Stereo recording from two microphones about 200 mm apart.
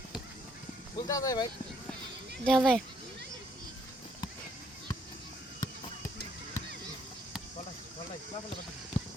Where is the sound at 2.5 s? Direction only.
Centre (ahead or behind).